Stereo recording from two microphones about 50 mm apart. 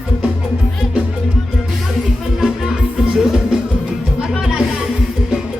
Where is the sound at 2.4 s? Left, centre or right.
Centre.